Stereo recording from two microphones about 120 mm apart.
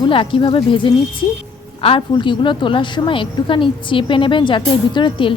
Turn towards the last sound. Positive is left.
turn(degrees=45)  # may be behind; listen again after turning